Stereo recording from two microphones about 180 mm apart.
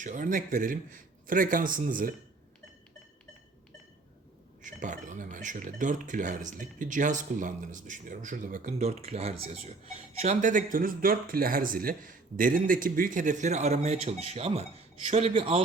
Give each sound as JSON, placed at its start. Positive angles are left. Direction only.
{"t": 0.0, "sound": "speech", "side_deg": -45}
{"t": 4.6, "sound": "speech", "side_deg": -45}